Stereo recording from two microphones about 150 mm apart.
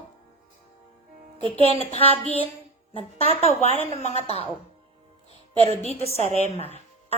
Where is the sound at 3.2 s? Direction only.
45° left (ahead or behind).